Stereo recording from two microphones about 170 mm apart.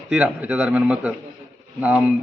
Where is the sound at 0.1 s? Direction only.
10° right (ahead or behind).